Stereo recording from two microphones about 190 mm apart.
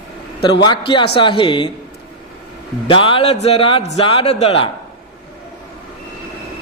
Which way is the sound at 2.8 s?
25° left (ahead or behind).